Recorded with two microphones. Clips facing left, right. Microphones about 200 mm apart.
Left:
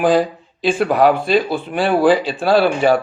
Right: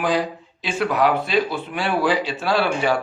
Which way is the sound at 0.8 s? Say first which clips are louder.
Left 5 dB; 50° left (ahead or behind).